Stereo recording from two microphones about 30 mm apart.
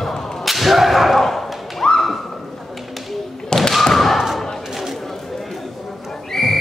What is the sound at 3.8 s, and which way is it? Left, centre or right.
Thump, centre.